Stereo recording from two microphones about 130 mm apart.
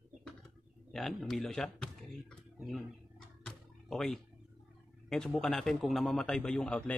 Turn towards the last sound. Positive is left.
turn(degrees=5)  # may be behind; listen again after turning